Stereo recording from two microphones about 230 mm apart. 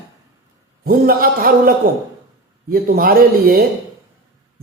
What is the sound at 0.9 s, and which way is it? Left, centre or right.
Speech, right.